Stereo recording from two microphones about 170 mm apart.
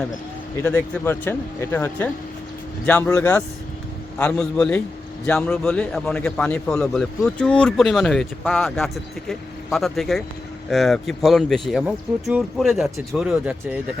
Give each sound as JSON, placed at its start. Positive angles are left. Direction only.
{"t": 0.5, "sound": "a man's voice", "side_deg": 10}